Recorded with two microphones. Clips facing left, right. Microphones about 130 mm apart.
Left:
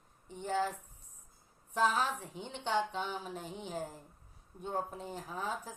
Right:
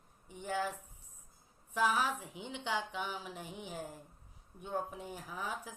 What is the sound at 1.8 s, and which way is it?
Speech, 10° right (ahead or behind).